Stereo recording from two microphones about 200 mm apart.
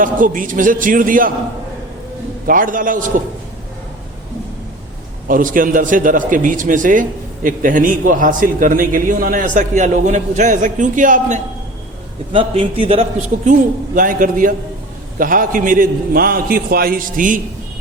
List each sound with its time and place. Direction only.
0.0 s a man's voice: 40° right (ahead or behind)
2.5 s a man's voice: 45° right (ahead or behind)
5.3 s a man's voice: 40° right (ahead or behind)
12.3 s a man's voice: 25° right (ahead or behind); by 17.4 s 40° right (ahead or behind)